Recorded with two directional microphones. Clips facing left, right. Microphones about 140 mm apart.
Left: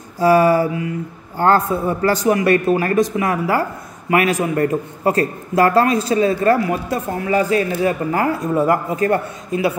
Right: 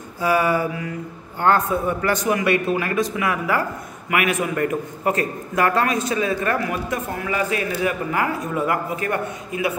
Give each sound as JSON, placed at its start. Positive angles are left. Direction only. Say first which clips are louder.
{"t": 0.2, "sound": "a man's voice", "louder": "left 6 dB", "side_deg": 40}